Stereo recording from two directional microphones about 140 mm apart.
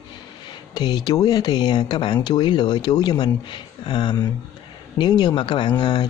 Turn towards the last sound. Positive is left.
turn(degrees=30)  # may be behind; listen again after turning